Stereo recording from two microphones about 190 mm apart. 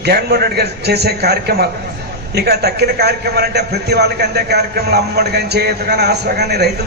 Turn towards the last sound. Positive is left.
turn(degrees=-60)  # may be behind; listen again after turning